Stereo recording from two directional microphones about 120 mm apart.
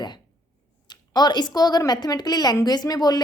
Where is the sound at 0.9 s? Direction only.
35° left (ahead or behind).